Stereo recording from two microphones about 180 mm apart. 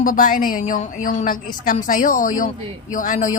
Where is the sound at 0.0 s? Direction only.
50° left (ahead or behind).